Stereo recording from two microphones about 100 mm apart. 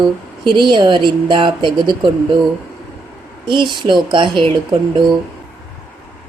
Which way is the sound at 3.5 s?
55° right (ahead or behind).